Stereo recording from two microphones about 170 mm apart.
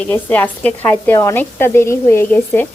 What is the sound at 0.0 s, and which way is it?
A woman's voice, 10° left (ahead or behind).